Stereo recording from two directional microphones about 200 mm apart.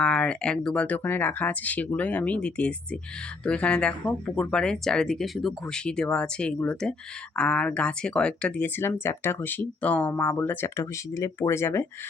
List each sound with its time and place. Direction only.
0.0 s speech: 5° left (ahead or behind)